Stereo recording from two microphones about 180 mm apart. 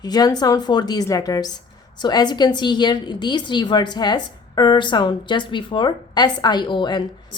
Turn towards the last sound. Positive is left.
turn(degrees=25)  # may be behind; listen again after turning